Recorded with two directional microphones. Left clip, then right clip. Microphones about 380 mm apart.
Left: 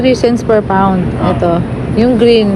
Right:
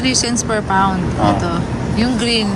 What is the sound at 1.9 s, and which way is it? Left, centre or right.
Speech, centre.